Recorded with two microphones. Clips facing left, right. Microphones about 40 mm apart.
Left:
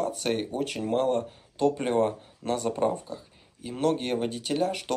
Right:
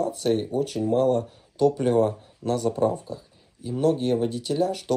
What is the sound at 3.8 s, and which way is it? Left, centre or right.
Speech, left.